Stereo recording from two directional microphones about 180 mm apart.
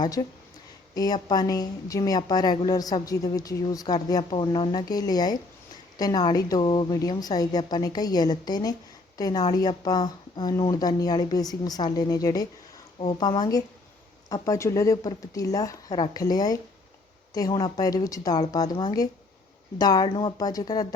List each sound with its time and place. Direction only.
0.0 s a woman's voice: 25° left (ahead or behind)